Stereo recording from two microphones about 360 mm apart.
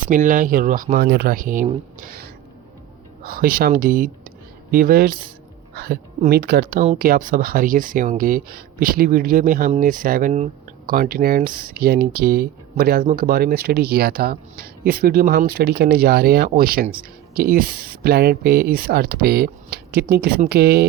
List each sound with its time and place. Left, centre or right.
0.0 s speech: right